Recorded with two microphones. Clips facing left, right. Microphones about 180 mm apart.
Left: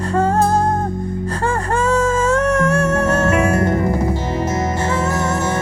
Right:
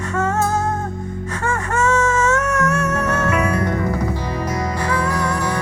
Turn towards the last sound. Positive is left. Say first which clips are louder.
# left 2 dB
turn(degrees=25)  # may be behind; listen again after turning